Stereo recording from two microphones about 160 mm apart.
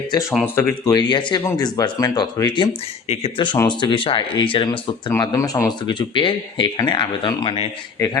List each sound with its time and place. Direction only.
0.1 s speech: 20° left (ahead or behind)
5.2 s speech: 20° left (ahead or behind)
8.0 s speech: 20° left (ahead or behind)